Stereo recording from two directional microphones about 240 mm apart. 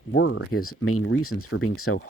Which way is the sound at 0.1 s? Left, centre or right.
Left.